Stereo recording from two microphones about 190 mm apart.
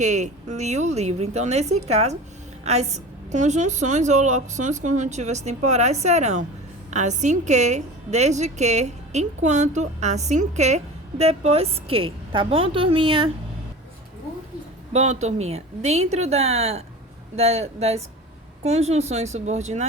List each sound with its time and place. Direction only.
0.0 s a woman's voice: 40° right (ahead or behind)
14.9 s a woman's voice: 35° right (ahead or behind)